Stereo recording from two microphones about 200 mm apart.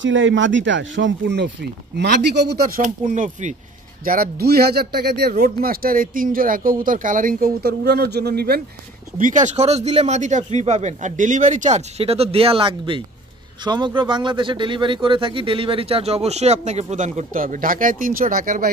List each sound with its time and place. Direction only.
0.0 s speech: 70° right (ahead or behind); by 2.8 s 55° right (ahead or behind)
2.8 s speech: 40° right (ahead or behind)
9.2 s speech: 40° right (ahead or behind)